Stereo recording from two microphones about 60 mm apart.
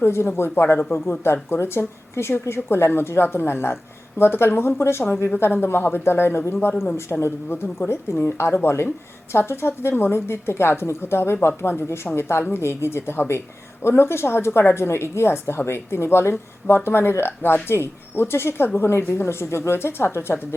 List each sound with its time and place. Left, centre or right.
0.0 s a woman's voice: left